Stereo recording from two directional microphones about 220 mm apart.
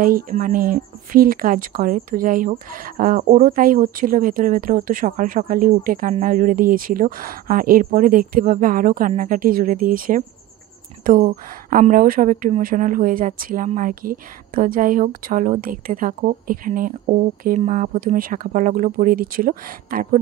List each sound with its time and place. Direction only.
0.0 s speech: 40° right (ahead or behind)